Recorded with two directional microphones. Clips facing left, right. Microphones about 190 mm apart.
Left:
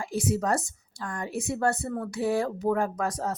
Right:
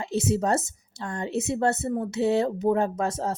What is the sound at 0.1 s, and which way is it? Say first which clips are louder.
Speech: right 3 dB; 25° right (ahead or behind).